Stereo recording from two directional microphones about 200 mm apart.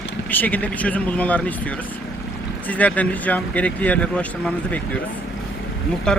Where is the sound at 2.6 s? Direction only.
5° left (ahead or behind).